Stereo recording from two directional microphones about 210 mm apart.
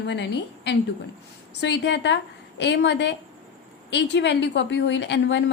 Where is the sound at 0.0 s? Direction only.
55° left (ahead or behind).